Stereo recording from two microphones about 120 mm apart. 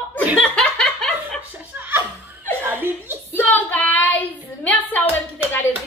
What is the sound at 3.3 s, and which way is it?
Child singing, 15° left (ahead or behind).